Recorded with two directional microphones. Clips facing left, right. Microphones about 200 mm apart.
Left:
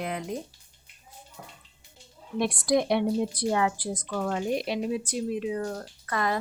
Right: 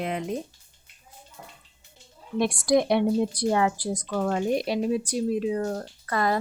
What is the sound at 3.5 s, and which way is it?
Speech, 40° right (ahead or behind).